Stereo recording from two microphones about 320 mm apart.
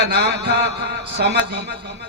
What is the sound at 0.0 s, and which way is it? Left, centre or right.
A man's voice, right.